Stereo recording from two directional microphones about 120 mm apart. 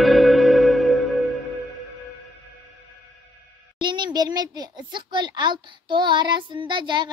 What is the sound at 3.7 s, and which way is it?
A child's voice, 40° right (ahead or behind).